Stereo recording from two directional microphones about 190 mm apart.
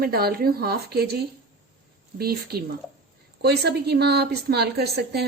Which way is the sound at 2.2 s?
55° right (ahead or behind).